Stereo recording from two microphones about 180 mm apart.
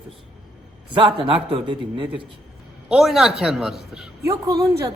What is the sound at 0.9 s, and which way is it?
A man's voice, 25° right (ahead or behind).